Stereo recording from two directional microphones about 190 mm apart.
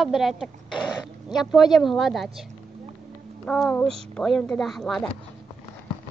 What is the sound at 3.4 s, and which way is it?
Speech, 5° left (ahead or behind).